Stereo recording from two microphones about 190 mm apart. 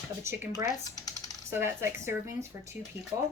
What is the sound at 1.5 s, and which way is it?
Speech, 15° right (ahead or behind).